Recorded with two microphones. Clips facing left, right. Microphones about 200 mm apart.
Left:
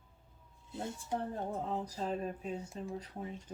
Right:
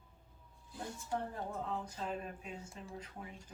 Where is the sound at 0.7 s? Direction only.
25° left (ahead or behind).